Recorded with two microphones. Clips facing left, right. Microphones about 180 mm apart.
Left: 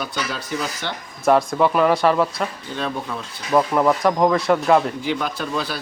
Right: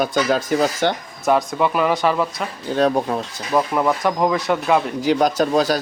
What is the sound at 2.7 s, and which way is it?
Speech, 45° right (ahead or behind).